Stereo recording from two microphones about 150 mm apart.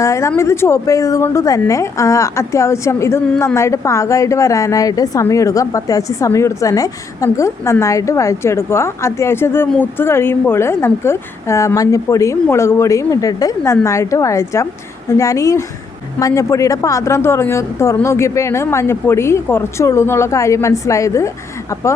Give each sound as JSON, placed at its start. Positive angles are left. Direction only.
{"t": 0.0, "sound": "a woman's voice", "side_deg": 20}